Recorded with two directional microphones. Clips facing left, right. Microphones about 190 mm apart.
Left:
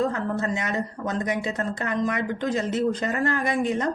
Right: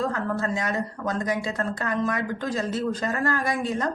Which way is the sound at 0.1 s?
20° left (ahead or behind).